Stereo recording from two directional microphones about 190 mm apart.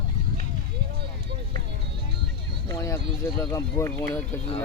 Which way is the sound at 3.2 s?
20° left (ahead or behind).